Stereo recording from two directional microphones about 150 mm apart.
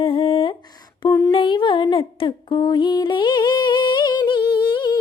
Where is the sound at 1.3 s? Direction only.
30° left (ahead or behind).